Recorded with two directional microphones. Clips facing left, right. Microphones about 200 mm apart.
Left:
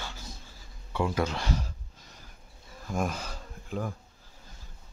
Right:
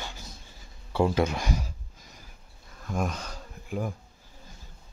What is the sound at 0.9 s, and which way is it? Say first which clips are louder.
Speech: right 5 dB; 35° right (ahead or behind).